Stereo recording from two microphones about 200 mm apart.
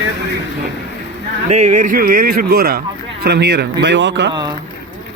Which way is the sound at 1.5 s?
35° right (ahead or behind).